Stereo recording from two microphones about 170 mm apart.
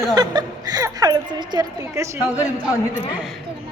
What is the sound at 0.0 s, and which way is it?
Speech, 20° right (ahead or behind).